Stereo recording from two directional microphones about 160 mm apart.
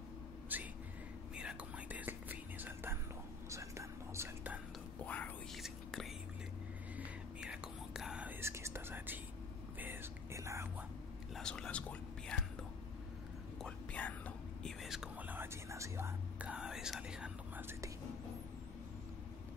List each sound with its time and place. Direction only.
0.5 s a sound: 10° right (ahead or behind)
1.3 s whispering: 5° right (ahead or behind)
5.0 s whispering: 10° left (ahead or behind); by 10.7 s 20° right (ahead or behind)
11.3 s whispering: 5° left (ahead or behind)
13.6 s whispering: 5° left (ahead or behind); by 17.9 s 15° right (ahead or behind)